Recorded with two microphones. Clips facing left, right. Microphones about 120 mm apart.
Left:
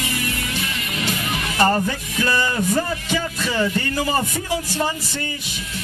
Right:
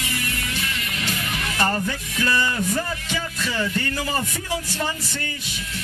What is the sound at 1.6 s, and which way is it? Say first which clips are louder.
Speech: left 6 dB; 35° left (ahead or behind).